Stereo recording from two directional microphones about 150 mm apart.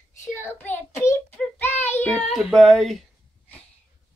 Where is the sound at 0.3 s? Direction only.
15° left (ahead or behind).